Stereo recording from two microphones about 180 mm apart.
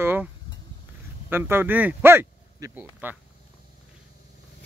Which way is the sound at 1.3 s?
10° right (ahead or behind).